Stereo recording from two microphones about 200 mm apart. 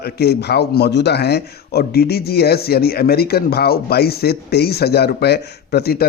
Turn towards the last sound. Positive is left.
turn(degrees=50)  # may be behind; listen again after turning